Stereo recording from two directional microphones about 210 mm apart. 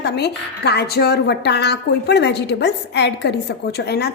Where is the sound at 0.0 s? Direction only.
50° left (ahead or behind).